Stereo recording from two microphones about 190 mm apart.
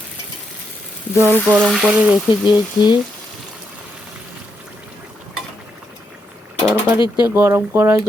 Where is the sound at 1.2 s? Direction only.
10° left (ahead or behind).